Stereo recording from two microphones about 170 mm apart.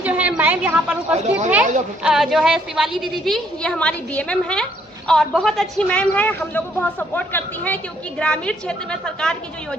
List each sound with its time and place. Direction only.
0.0 s a sound: 10° right (ahead or behind)
1.1 s speech: 45° right (ahead or behind)
2.0 s a woman's voice: centre (ahead or behind)